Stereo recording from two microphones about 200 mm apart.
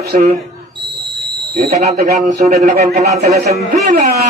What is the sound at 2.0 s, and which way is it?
Speech, 45° right (ahead or behind).